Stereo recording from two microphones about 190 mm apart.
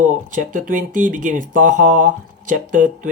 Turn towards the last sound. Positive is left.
turn(degrees=-45)  # may be behind; listen again after turning